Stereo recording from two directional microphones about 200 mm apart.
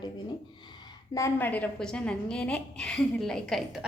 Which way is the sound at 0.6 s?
20° left (ahead or behind).